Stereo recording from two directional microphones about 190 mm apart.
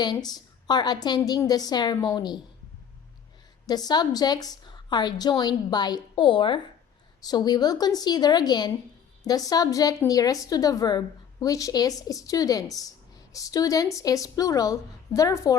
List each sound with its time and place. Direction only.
0.0 s a woman's voice: 20° left (ahead or behind)
3.7 s a woman's voice: 20° left (ahead or behind)